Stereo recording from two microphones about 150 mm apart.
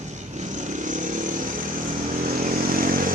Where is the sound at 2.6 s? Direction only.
70° right (ahead or behind).